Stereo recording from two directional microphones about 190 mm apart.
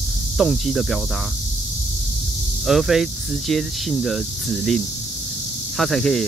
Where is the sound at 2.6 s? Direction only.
Centre (ahead or behind).